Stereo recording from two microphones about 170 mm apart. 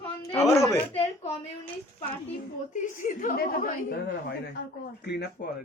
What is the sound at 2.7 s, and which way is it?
A man's voice, 50° left (ahead or behind).